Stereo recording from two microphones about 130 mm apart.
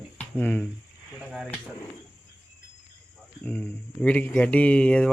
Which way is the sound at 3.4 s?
10° left (ahead or behind).